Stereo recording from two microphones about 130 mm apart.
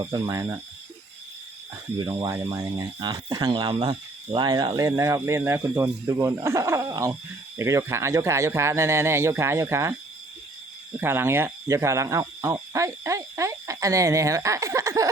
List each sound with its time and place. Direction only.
0.0 s speech: 30° right (ahead or behind)
2.0 s speech: 30° right (ahead or behind)
11.0 s speech: 20° right (ahead or behind)